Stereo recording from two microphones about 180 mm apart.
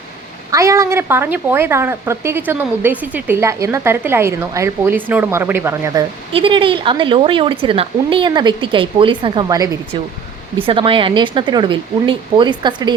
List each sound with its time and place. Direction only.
0.5 s a woman's voice: 15° right (ahead or behind)
6.3 s speech: 30° right (ahead or behind)